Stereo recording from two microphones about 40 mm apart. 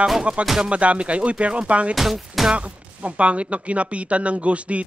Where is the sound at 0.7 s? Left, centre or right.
Right.